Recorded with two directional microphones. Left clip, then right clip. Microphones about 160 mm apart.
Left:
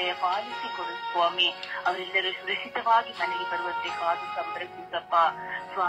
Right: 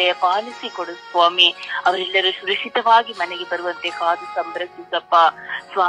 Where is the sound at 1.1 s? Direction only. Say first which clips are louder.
Right 10 dB; 60° right (ahead or behind).